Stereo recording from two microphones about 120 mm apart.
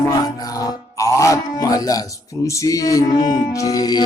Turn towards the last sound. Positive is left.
turn(degrees=35)  # may be behind; listen again after turning